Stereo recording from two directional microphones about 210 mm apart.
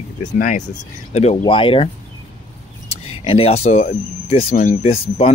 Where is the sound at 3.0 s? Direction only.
25° left (ahead or behind).